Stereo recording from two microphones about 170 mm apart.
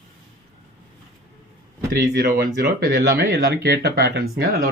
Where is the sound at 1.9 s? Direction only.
60° right (ahead or behind).